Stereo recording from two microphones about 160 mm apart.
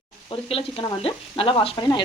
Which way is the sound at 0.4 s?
35° left (ahead or behind).